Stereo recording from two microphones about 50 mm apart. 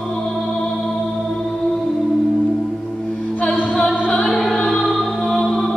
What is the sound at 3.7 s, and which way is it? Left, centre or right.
Music, centre.